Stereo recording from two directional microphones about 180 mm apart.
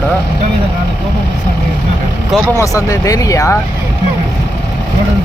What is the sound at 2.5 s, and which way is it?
Speech, 20° left (ahead or behind).